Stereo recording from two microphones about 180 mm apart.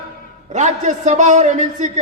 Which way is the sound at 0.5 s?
40° right (ahead or behind).